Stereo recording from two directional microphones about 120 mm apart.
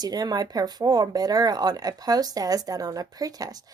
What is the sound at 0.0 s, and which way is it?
Speech, 35° right (ahead or behind).